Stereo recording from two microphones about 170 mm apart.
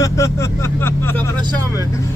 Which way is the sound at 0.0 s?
20° left (ahead or behind).